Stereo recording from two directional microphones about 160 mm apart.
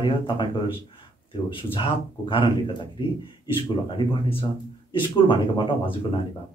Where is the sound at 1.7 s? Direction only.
30° left (ahead or behind).